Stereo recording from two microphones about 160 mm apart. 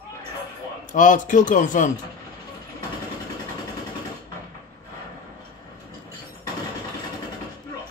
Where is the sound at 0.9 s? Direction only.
50° left (ahead or behind).